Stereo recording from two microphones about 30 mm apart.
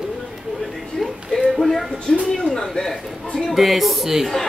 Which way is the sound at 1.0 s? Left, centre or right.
Centre.